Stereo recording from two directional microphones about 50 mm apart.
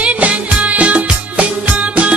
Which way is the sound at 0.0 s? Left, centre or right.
Right.